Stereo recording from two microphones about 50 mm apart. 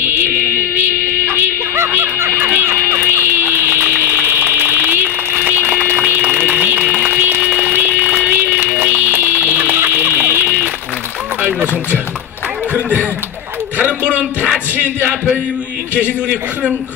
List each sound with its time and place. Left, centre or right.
0.0 s music: right
6.9 s a sound: right
7.7 s music: right
14.0 s music: right
15.9 s a man's voice: right